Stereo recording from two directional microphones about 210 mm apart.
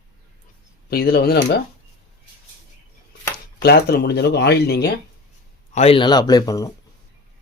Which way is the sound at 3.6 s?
50° left (ahead or behind).